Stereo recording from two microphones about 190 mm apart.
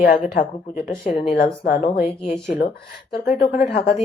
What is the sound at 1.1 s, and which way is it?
Speech, 30° left (ahead or behind).